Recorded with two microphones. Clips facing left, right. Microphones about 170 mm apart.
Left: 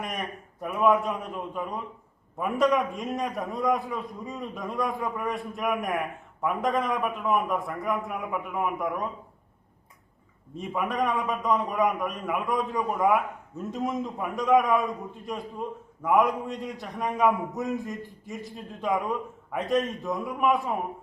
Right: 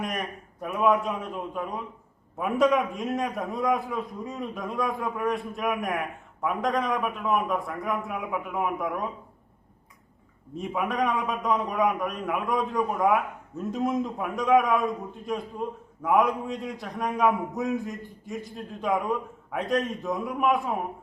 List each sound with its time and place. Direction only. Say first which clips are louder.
0.0 s a man's voice: right 2 dB; centre (ahead or behind)
10.5 s a man's voice: right 1 dB; centre (ahead or behind)